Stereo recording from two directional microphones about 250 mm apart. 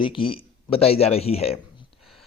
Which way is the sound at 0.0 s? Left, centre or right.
Centre.